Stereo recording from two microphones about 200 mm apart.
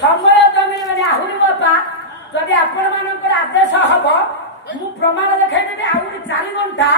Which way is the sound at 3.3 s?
65° left (ahead or behind).